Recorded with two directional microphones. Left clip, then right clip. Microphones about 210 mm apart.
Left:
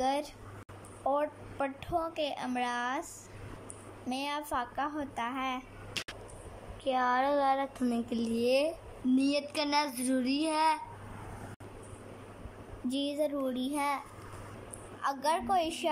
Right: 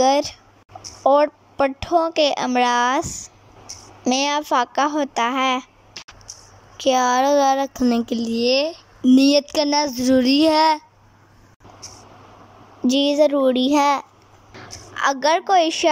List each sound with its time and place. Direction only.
0.0 s a sound: 35° right (ahead or behind)
1.0 s a woman's voice: 40° right (ahead or behind)
6.8 s speech: 25° right (ahead or behind)
8.1 s speech: 10° right (ahead or behind)
9.1 s a woman's voice: 35° right (ahead or behind)
12.9 s a woman's voice: 40° right (ahead or behind)